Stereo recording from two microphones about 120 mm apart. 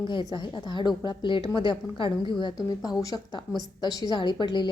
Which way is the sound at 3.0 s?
30° left (ahead or behind).